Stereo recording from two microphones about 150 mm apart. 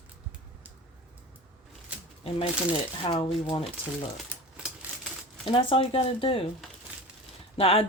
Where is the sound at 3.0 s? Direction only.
35° left (ahead or behind).